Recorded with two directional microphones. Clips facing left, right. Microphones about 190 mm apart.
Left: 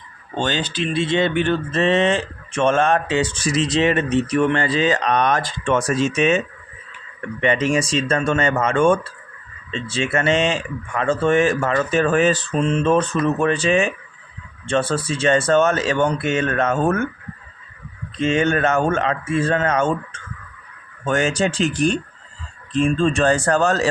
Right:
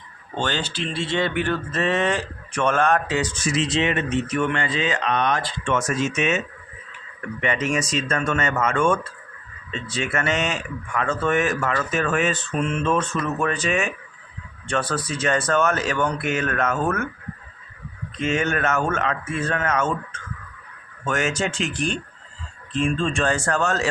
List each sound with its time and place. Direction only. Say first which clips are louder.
0.3 s speech: left 4 dB; 20° left (ahead or behind)
7.4 s speech: left 5 dB; 30° left (ahead or behind)
18.2 s speech: left 5 dB; 30° left (ahead or behind)